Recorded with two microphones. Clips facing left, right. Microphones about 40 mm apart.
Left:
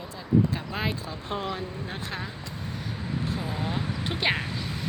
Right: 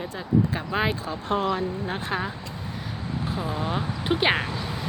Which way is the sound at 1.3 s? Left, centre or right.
Right.